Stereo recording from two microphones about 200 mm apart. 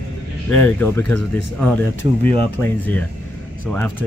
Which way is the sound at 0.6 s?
10° left (ahead or behind).